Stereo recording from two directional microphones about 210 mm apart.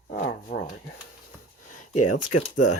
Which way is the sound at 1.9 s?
90° left.